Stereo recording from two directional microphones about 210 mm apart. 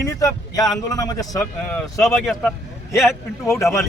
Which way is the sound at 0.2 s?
15° left (ahead or behind).